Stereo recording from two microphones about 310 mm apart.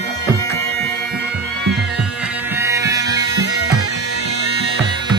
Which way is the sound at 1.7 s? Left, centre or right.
Centre.